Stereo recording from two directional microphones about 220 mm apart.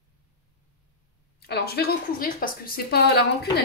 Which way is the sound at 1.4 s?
45° left (ahead or behind).